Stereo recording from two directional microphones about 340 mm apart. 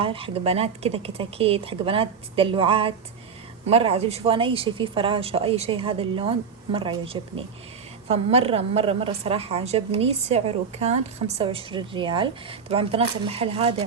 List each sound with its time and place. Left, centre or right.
0.0 s speech: centre